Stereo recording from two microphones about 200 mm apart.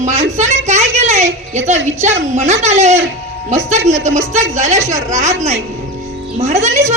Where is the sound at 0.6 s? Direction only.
35° right (ahead or behind).